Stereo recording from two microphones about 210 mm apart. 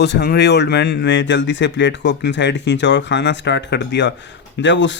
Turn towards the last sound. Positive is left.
turn(degrees=60)  # may be behind; listen again after turning